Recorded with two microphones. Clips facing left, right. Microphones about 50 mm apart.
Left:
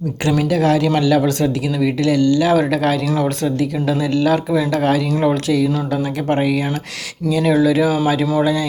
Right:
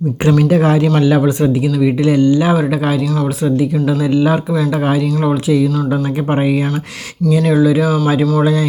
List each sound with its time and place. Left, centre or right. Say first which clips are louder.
0.4 s speech: right 3 dB; right
4.5 s speech: right 1 dB; centre
7.5 s speech: right 1 dB; centre